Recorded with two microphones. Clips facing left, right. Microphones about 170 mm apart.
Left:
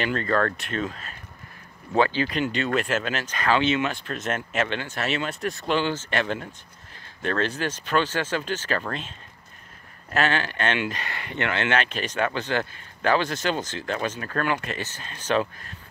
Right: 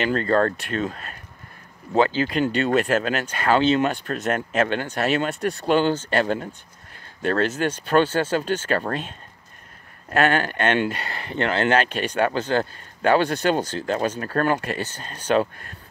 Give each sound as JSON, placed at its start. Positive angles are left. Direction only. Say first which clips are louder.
{"t": 0.0, "sound": "speech", "louder": "right 4 dB", "side_deg": -35}
{"t": 2.0, "sound": "speech", "louder": "right 3 dB", "side_deg": -30}
{"t": 2.6, "sound": "speech", "louder": "right 6 dB", "side_deg": -40}
{"t": 10.1, "sound": "speech", "louder": "right 4 dB", "side_deg": -50}